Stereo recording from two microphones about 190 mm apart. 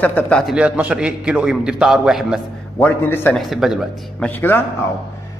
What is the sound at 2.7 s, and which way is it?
Speech, 10° left (ahead or behind).